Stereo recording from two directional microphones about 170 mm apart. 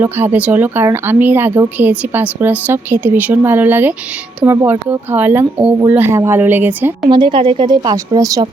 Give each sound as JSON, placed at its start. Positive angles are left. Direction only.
{"t": 0.0, "sound": "speech", "side_deg": -10}
{"t": 7.1, "sound": "a woman's voice", "side_deg": -30}